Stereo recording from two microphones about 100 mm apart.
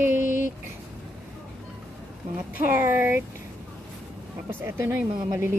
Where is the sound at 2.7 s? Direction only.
20° right (ahead or behind).